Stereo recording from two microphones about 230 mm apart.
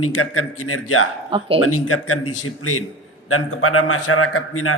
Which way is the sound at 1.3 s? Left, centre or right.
Right.